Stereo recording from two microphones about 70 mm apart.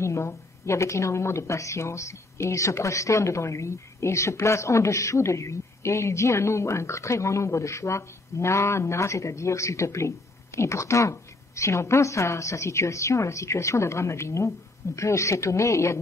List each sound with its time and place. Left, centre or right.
0.0 s a woman's voice: left